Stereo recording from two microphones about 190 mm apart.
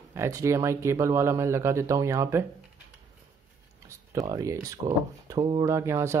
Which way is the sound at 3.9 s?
15° right (ahead or behind).